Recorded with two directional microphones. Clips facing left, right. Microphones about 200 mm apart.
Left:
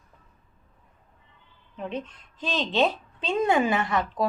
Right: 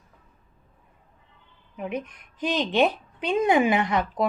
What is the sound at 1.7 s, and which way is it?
A woman's voice, 10° right (ahead or behind).